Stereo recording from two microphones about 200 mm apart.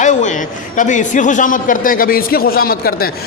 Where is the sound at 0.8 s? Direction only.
40° left (ahead or behind).